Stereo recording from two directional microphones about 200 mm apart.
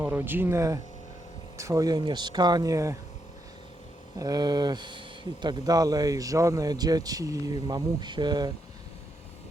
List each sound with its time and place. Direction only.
0.0 s speech: 10° right (ahead or behind)
4.2 s speech: 20° right (ahead or behind)